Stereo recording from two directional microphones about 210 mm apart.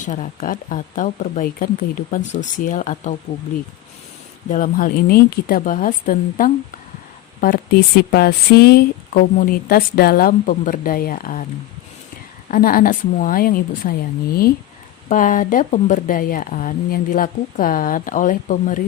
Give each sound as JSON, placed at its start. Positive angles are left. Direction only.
{"t": 0.0, "sound": "speech", "side_deg": 35}
{"t": 4.4, "sound": "speech", "side_deg": 40}
{"t": 12.5, "sound": "speech", "side_deg": 40}
{"t": 15.1, "sound": "speech", "side_deg": 40}